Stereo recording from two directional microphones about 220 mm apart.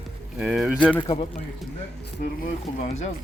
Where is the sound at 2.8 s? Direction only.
30° left (ahead or behind).